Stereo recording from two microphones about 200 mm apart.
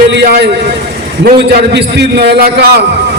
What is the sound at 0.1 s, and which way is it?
A man's voice, 55° right (ahead or behind).